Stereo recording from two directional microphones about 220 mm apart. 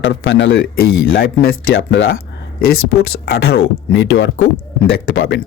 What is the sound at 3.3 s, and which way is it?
Speech, 45° left (ahead or behind).